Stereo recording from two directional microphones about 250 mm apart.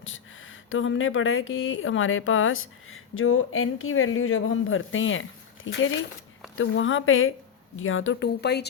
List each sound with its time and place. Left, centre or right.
0.0 s speech: left